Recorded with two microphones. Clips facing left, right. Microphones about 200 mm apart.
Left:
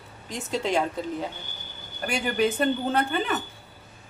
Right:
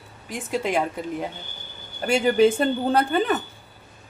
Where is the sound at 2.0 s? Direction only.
25° right (ahead or behind).